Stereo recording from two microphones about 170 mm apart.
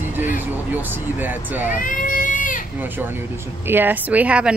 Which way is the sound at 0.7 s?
10° right (ahead or behind).